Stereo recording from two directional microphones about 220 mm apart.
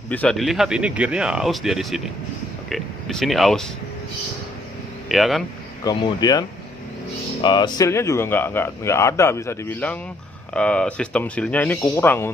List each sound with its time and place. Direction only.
0.1 s speech: 5° left (ahead or behind)
5.0 s speech: centre (ahead or behind)
5.9 s speech: 20° left (ahead or behind)
7.4 s speech: 20° left (ahead or behind)